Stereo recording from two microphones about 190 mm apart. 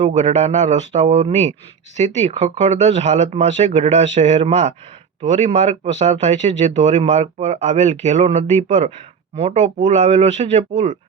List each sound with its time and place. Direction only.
0.0 s speech: 35° right (ahead or behind)